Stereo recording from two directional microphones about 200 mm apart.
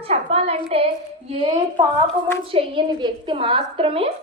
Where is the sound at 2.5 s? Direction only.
25° right (ahead or behind).